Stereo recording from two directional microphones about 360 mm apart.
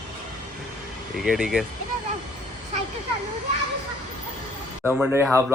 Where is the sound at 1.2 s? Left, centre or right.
Centre.